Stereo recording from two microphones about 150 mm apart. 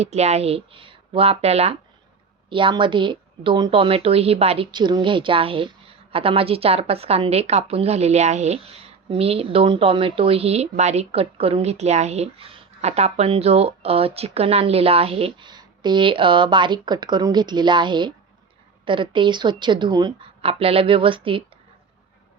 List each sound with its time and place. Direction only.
0.0 s a woman's voice: 45° right (ahead or behind); by 20.3 s 30° right (ahead or behind)
20.4 s a woman's voice: 40° right (ahead or behind)